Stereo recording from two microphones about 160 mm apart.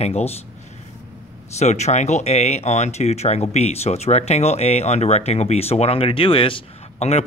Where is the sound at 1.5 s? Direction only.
45° left (ahead or behind).